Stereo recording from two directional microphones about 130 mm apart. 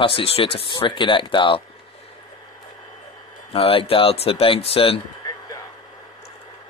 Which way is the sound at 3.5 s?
45° left (ahead or behind).